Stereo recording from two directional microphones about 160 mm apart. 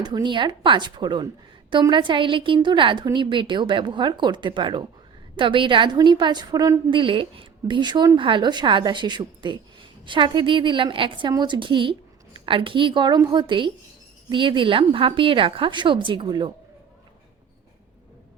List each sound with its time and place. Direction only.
0.0 s a woman's voice: 30° right (ahead or behind)